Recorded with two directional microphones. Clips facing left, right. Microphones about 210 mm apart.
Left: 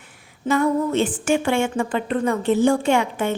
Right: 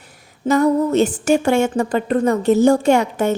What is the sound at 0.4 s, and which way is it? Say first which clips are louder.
A woman's voice: right 4 dB; 40° right (ahead or behind).